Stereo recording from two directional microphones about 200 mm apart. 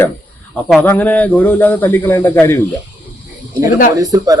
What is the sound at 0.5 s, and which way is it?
A man's voice, 10° left (ahead or behind).